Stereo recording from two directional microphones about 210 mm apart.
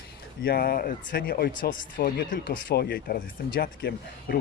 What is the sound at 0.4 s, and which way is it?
Speech, 45° left (ahead or behind).